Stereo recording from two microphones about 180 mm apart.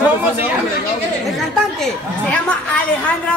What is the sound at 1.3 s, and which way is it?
Speech, 5° left (ahead or behind).